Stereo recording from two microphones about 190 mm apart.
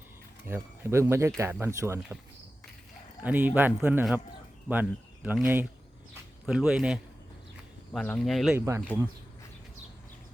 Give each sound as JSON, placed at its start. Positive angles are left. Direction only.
{"t": 0.4, "sound": "speech", "side_deg": -15}
{"t": 3.2, "sound": "speech", "side_deg": -10}
{"t": 8.5, "sound": "speech", "side_deg": -15}